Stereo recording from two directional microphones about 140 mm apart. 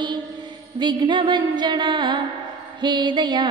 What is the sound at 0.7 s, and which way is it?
Music, 35° right (ahead or behind).